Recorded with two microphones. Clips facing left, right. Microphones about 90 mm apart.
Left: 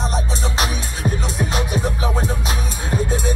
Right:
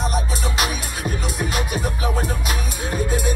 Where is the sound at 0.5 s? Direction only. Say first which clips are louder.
Even; 30° left (ahead or behind).